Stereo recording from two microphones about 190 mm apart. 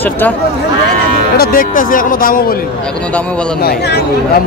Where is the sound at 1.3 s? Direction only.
45° left (ahead or behind).